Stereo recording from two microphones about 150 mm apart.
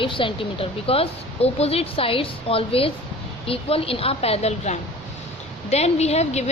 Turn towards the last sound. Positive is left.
turn(degrees=45)  # may be behind; listen again after turning